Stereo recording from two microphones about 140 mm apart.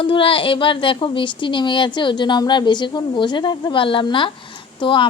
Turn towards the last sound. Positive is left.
turn(degrees=35)  # may be behind; listen again after turning